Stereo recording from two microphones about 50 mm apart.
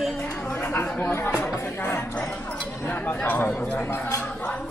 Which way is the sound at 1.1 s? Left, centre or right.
Left.